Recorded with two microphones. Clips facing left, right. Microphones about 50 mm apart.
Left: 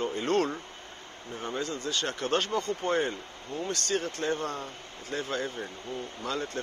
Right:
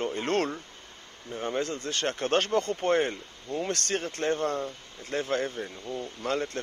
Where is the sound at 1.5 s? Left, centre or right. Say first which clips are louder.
Right 2 dB; right.